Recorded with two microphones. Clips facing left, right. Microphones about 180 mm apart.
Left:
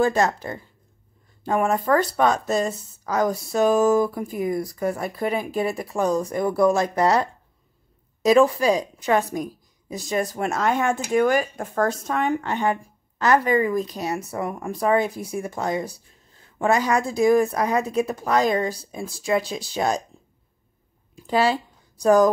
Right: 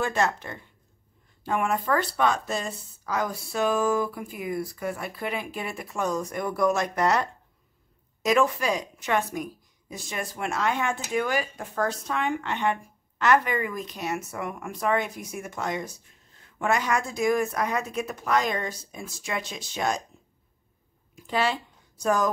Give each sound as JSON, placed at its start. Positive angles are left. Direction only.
{"t": 0.0, "sound": "speech", "side_deg": 40}
{"t": 21.3, "sound": "speech", "side_deg": 35}